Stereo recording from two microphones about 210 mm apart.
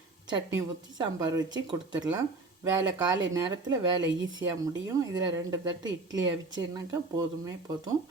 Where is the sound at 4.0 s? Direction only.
60° right (ahead or behind).